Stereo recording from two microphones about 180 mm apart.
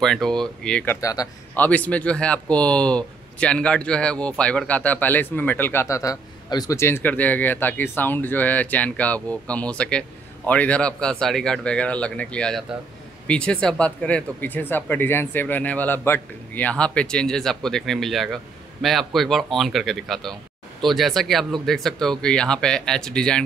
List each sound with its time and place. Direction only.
0.0 s speech: centre (ahead or behind)
1.0 s speech: 20° left (ahead or behind)